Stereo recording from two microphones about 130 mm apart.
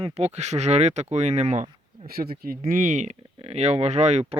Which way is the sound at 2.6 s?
85° right.